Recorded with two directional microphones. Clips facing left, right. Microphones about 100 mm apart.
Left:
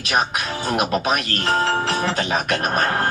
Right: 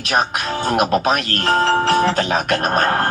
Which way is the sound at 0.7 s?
40° right (ahead or behind).